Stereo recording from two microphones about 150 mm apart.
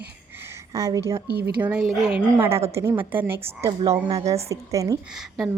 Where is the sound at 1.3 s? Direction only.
90° right.